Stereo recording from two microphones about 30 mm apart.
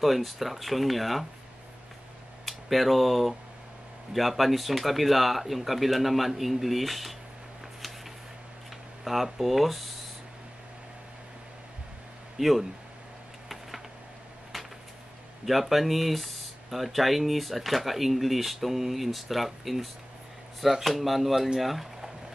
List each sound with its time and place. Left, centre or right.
0.0 s speech: centre
2.4 s speech: centre
9.0 s speech: centre
12.4 s speech: centre
15.4 s speech: centre